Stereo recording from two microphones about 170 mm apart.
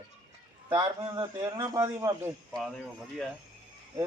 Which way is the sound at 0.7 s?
25° right (ahead or behind).